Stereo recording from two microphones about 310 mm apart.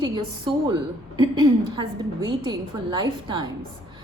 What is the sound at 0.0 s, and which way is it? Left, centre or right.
A woman's voice, centre.